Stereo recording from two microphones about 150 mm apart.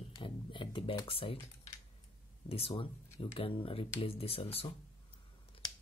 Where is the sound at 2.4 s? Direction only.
40° left (ahead or behind).